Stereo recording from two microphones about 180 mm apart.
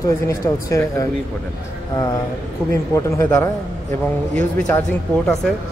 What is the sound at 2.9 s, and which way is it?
Speech, 15° left (ahead or behind).